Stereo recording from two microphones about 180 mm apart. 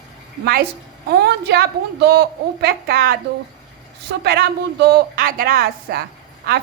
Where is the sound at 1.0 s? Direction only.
60° right (ahead or behind).